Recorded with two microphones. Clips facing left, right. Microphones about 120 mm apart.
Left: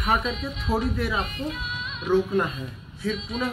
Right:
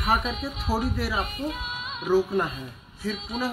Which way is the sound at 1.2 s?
45° right (ahead or behind).